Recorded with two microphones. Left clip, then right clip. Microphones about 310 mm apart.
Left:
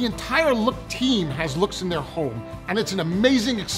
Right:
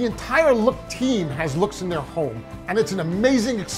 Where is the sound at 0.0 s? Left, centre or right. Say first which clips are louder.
Right 3 dB; right.